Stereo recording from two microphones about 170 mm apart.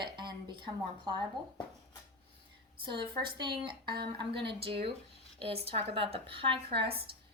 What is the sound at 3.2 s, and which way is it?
A woman's voice, 25° right (ahead or behind).